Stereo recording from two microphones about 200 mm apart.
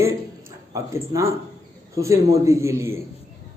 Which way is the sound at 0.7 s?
15° right (ahead or behind).